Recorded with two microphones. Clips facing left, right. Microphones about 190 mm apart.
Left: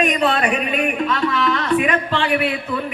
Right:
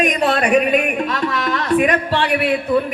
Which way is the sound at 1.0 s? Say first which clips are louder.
Left 1 dB; 45° right (ahead or behind).